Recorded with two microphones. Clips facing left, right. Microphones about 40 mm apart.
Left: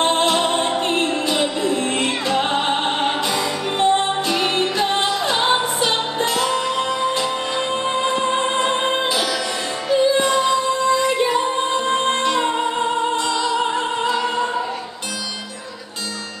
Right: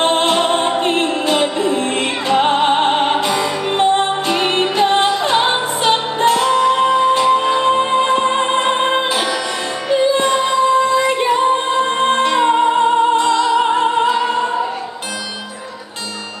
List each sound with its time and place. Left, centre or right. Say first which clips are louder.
0.0 s music: right 3 dB; centre
9.8 s female singing: right 2 dB; centre